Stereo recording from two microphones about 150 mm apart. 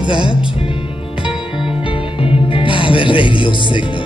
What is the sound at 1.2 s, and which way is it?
Music, 35° left (ahead or behind).